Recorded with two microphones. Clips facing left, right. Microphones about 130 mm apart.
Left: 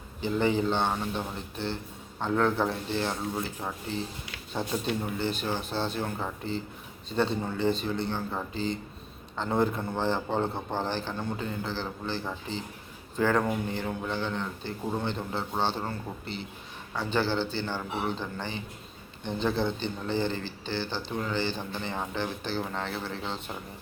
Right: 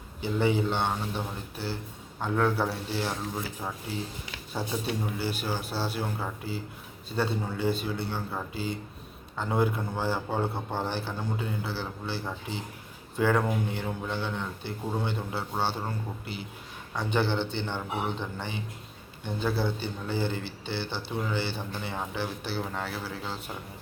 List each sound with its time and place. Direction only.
0.2 s a man's voice: 10° right (ahead or behind)
4.5 s a man's voice: 10° right (ahead or behind)